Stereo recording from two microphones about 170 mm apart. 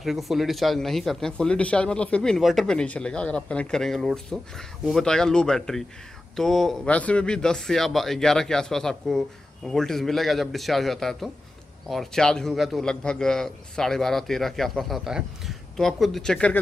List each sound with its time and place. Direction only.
0.0 s speech: centre (ahead or behind)